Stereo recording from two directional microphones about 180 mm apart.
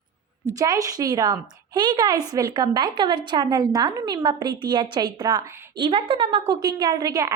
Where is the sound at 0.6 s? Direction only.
20° right (ahead or behind).